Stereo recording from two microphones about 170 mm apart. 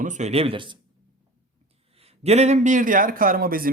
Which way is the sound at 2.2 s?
40° right (ahead or behind).